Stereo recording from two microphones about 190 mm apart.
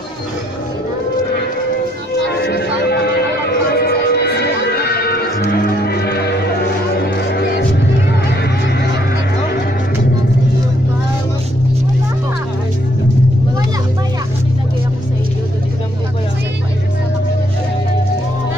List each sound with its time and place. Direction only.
2.2 s music: 60° left (ahead or behind)